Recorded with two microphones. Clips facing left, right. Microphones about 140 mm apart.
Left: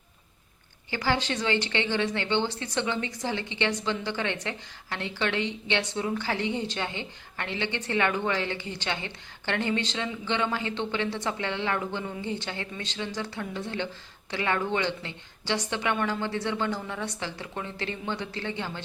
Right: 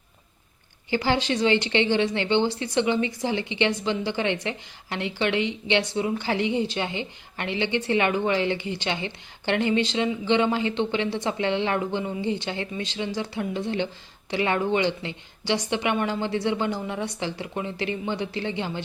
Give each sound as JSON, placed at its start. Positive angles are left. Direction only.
{"t": 0.9, "sound": "a woman's voice", "side_deg": -20}